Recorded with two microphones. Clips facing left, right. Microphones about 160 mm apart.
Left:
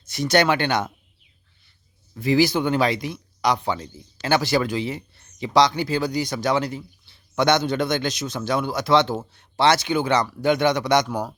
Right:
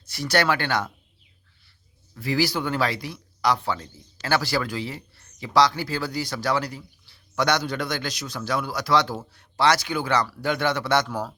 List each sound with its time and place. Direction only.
0.0 s speech: 20° left (ahead or behind)
2.1 s speech: 20° left (ahead or behind)